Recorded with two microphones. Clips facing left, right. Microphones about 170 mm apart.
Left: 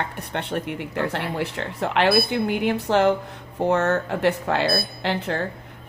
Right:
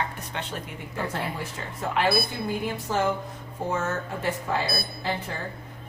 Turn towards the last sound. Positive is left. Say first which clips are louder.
# left 6 dB
turn(degrees=70)  # may be behind; listen again after turning